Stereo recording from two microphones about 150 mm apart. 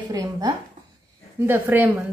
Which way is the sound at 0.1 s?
25° right (ahead or behind).